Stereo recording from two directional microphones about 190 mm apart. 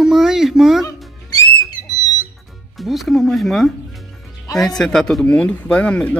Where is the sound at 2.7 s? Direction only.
Centre (ahead or behind).